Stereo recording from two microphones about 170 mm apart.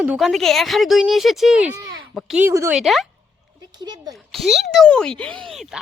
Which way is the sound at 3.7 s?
25° right (ahead or behind).